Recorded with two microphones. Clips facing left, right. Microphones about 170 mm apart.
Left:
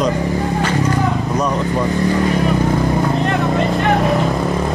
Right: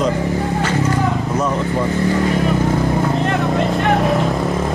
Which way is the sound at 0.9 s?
15° left (ahead or behind).